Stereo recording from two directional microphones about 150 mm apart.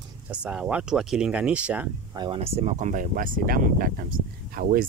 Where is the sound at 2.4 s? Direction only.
45° right (ahead or behind).